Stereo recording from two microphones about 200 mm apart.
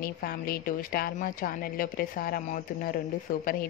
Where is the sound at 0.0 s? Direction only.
50° left (ahead or behind).